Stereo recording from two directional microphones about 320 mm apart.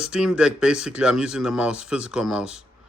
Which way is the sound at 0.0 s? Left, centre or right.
Centre.